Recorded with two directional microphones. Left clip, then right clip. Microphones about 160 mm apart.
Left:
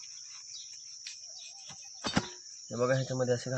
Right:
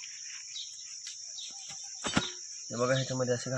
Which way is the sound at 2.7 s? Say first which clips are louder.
Even; 25° left (ahead or behind).